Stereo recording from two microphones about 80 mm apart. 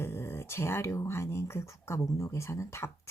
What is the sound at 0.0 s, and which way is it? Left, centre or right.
Speech, left.